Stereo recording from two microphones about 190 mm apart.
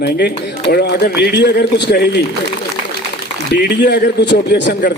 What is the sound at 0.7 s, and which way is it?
A man's voice, 60° left (ahead or behind).